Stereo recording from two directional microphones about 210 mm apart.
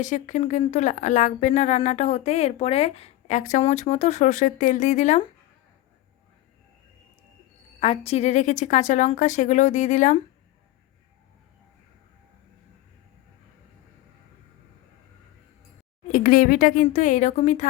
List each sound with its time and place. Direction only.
0.0 s a woman's voice: 35° left (ahead or behind)
7.8 s a woman's voice: 30° left (ahead or behind)
16.1 s a woman's voice: 40° left (ahead or behind)